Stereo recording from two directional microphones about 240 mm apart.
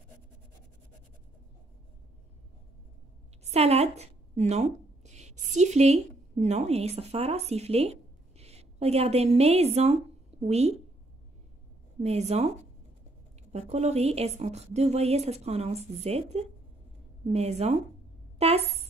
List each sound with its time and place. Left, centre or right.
3.4 s a woman's voice: right
12.0 s a woman's voice: right
13.5 s a woman's voice: right